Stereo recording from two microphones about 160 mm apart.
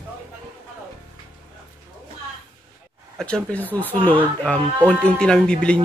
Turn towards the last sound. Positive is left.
turn(degrees=5)  # may be behind; listen again after turning